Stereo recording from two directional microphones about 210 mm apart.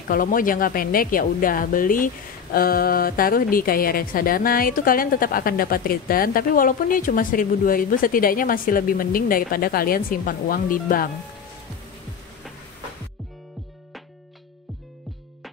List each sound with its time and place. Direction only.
0.1 s a woman's voice: 40° left (ahead or behind)